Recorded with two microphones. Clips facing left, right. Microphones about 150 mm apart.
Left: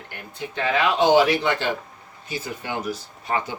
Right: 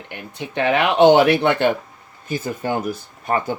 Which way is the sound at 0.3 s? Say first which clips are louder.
Right 5 dB; 65° right (ahead or behind).